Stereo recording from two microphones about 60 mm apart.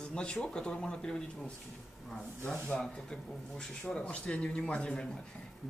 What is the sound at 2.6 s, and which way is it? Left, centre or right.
Speech, centre.